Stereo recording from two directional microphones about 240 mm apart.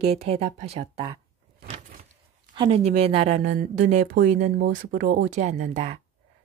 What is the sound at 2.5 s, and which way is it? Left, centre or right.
A woman's voice, right.